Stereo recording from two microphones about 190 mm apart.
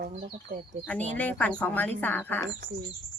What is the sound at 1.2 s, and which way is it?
Speech, 10° left (ahead or behind).